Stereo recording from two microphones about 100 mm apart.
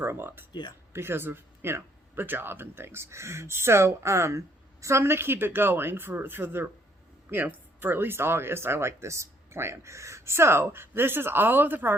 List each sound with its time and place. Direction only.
0.0 s speech: 25° right (ahead or behind)